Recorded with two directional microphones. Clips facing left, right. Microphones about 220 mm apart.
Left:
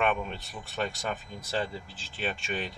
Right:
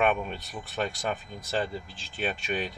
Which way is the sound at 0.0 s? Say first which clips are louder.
Right 2 dB; centre (ahead or behind).